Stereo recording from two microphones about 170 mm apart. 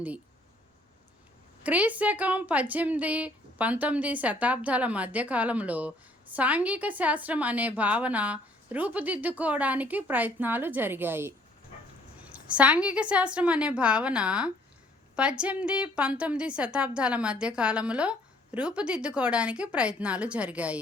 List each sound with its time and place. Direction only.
1.6 s a woman's voice: 10° right (ahead or behind)